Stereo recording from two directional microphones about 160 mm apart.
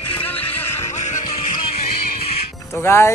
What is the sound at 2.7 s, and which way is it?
Speech, 15° left (ahead or behind).